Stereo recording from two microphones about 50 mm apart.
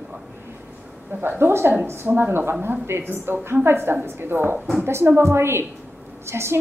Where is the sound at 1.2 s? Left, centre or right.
Right.